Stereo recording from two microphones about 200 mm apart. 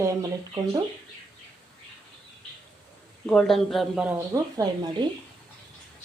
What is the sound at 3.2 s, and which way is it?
Speech, 5° left (ahead or behind).